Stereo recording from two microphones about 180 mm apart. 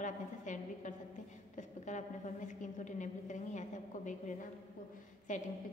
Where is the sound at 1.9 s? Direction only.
45° left (ahead or behind).